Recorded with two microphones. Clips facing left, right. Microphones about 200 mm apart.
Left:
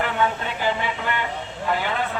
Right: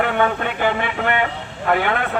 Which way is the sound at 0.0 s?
60° right (ahead or behind).